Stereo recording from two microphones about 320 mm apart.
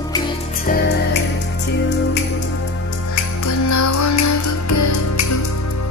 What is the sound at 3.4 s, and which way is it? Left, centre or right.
Music, left.